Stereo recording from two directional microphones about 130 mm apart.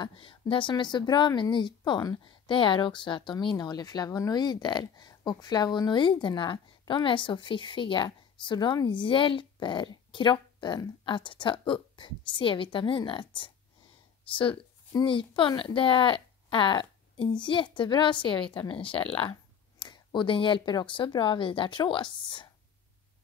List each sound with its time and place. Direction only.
0.0 s a woman's voice: 40° left (ahead or behind)